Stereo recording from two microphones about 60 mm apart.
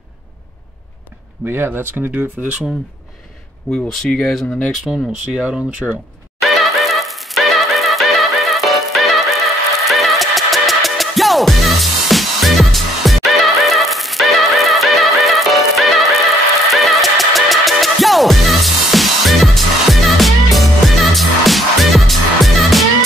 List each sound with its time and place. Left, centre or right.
1.4 s speech: right
3.7 s speech: centre
4.8 s speech: centre
5.8 s speech: centre
6.6 s music: centre